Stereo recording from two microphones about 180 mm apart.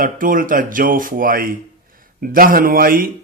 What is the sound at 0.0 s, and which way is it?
A man's voice, 50° right (ahead or behind).